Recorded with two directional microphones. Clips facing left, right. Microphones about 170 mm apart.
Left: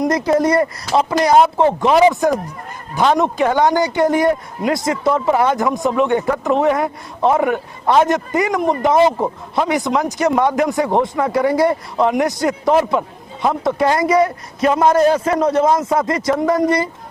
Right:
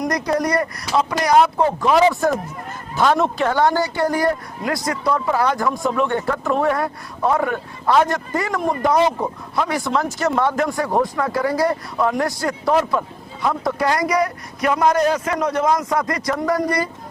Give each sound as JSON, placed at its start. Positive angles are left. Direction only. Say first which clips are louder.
{"t": 0.0, "sound": "speech", "louder": "left 5 dB", "side_deg": 25}